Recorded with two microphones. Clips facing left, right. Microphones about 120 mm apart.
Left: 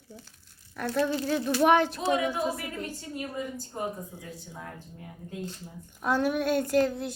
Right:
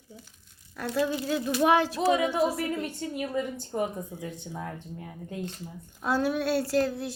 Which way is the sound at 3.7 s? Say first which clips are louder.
Right 5 dB; 90° right.